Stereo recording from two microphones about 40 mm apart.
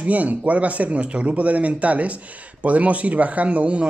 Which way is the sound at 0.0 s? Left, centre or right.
Right.